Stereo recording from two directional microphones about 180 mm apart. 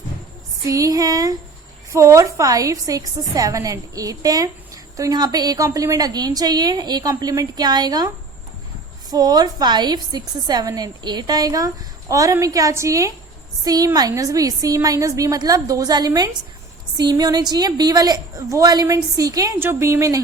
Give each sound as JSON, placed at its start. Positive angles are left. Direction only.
{"t": 0.7, "sound": "a woman's voice", "side_deg": -20}